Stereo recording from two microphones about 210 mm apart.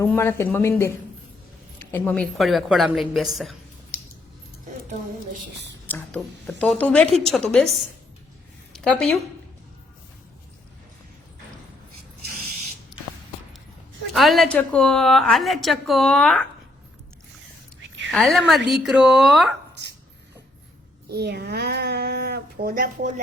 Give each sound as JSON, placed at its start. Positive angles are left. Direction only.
{"t": 0.0, "sound": "a woman's voice", "side_deg": 10}
{"t": 5.8, "sound": "a woman's voice", "side_deg": 10}
{"t": 14.1, "sound": "a woman's voice", "side_deg": 0}
{"t": 18.1, "sound": "a woman's voice", "side_deg": 0}
{"t": 21.1, "sound": "a child's voice", "side_deg": -50}